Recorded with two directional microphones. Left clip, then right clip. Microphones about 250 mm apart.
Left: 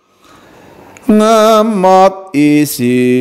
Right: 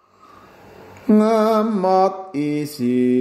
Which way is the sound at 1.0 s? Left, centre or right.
Left.